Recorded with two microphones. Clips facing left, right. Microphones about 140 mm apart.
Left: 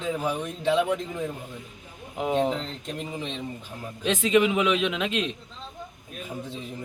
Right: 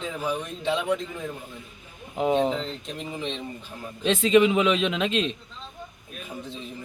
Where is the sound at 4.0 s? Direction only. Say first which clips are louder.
Right 3 dB; 10° left (ahead or behind).